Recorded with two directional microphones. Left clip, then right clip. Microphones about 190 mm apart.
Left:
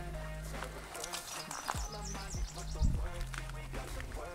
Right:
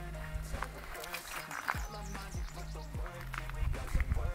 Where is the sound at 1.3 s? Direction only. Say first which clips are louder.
Right 5 dB; 15° right (ahead or behind).